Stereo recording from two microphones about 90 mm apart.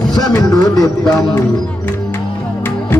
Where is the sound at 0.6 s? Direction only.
45° left (ahead or behind).